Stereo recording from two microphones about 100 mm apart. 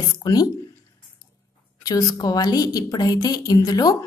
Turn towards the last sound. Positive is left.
turn(degrees=40)  # may be behind; listen again after turning